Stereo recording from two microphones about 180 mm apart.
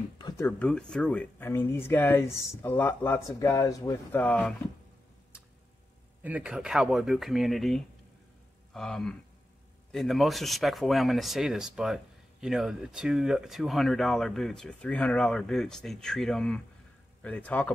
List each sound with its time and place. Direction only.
0.2 s a sound: 20° left (ahead or behind)
0.5 s speech: 5° left (ahead or behind)
6.2 s speech: 5° right (ahead or behind); by 17.7 s 10° left (ahead or behind)